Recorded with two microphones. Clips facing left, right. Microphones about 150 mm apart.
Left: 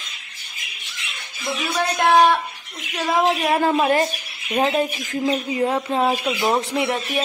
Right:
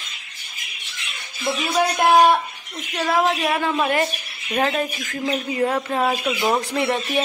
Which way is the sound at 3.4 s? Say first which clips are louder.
Left 3 dB; 35° left (ahead or behind).